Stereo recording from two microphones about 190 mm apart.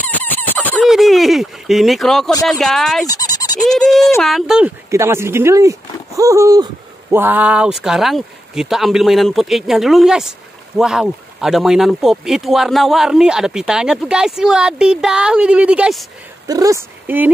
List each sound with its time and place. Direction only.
0.0 s squeal: 10° left (ahead or behind)
2.4 s speech: centre (ahead or behind)
3.1 s frog: 20° left (ahead or behind)
3.6 s speech: centre (ahead or behind)
16.4 s speech: 20° right (ahead or behind)